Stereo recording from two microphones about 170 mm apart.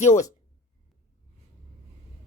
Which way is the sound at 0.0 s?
40° left (ahead or behind).